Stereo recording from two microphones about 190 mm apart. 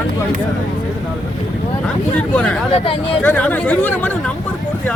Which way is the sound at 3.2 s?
10° left (ahead or behind).